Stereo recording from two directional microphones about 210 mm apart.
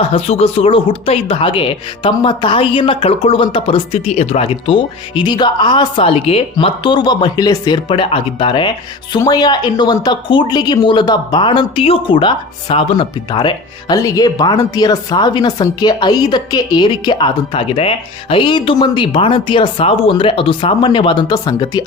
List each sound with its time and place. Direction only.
0.1 s speech: 30° left (ahead or behind)